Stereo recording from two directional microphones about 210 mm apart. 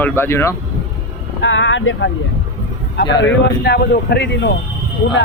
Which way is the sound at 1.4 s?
60° left (ahead or behind).